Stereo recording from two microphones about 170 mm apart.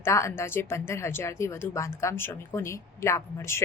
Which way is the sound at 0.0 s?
15° left (ahead or behind).